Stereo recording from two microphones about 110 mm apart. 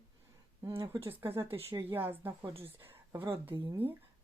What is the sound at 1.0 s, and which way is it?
Speech, 20° right (ahead or behind).